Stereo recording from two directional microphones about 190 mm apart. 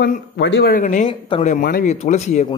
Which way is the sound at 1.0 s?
30° left (ahead or behind).